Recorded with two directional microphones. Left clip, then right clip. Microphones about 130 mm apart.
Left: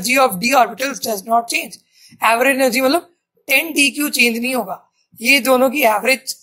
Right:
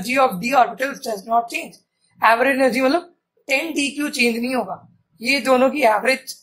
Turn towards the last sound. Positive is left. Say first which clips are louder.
# left 2 dB
turn(degrees=15)  # may be behind; listen again after turning